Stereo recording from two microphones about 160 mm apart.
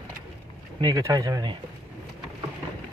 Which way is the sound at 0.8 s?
20° right (ahead or behind).